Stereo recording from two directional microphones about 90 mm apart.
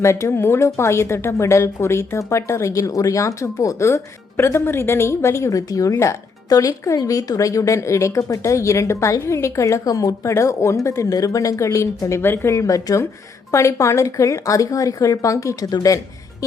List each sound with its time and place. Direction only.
0.0 s speech: 35° left (ahead or behind)